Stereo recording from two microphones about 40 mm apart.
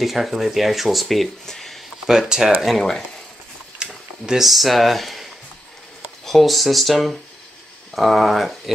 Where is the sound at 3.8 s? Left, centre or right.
Right.